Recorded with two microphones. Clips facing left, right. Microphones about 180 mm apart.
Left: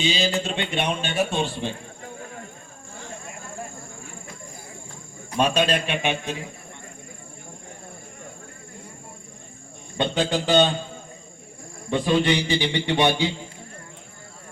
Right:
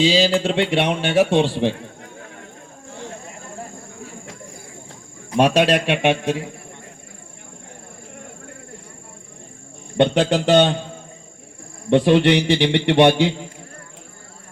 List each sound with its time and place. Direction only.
0.0 s a man's voice: 90° right
5.4 s a man's voice: 90° right
10.0 s a man's voice: 70° right (ahead or behind)
11.9 s a man's voice: 70° right (ahead or behind)